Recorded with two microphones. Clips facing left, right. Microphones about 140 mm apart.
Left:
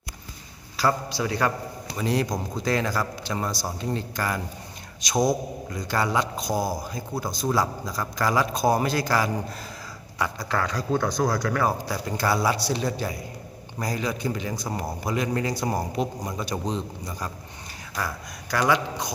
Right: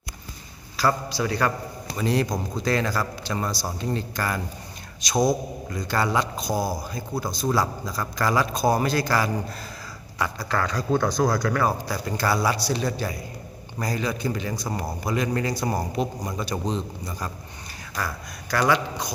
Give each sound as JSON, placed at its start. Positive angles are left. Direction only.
{"t": 0.8, "sound": "a man's voice", "side_deg": 20}
{"t": 5.7, "sound": "a man's voice", "side_deg": 15}
{"t": 18.7, "sound": "speech", "side_deg": 20}